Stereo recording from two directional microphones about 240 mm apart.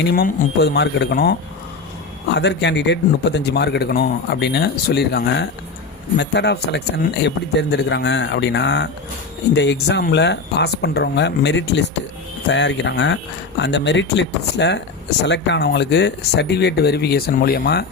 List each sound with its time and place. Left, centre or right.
0.1 s speech: left